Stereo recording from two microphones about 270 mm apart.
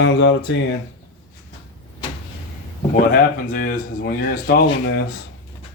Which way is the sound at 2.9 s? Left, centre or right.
Left.